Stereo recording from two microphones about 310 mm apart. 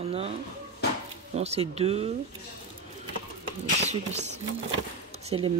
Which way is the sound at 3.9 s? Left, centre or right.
Right.